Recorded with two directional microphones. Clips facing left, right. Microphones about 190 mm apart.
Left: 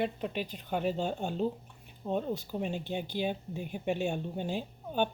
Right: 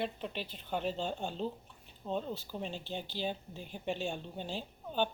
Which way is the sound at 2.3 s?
15° left (ahead or behind).